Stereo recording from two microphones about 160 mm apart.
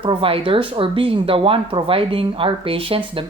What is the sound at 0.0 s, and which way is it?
Speech, 35° right (ahead or behind).